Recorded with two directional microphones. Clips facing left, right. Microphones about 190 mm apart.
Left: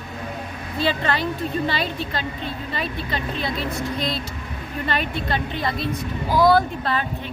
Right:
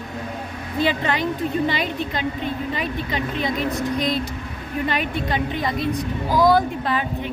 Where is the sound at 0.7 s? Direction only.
15° right (ahead or behind).